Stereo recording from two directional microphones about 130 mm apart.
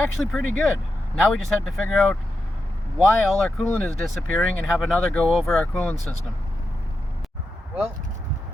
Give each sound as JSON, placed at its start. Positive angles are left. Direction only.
{"t": 0.3, "sound": "speech", "side_deg": 0}
{"t": 3.6, "sound": "speech", "side_deg": 15}
{"t": 4.0, "sound": "speech", "side_deg": 5}